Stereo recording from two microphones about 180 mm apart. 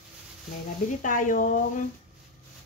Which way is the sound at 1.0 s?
45° left (ahead or behind).